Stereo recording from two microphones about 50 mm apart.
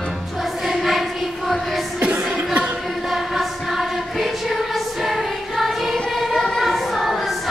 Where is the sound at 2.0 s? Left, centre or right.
Right.